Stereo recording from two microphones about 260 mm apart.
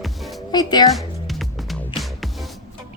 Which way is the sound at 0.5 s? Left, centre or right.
Centre.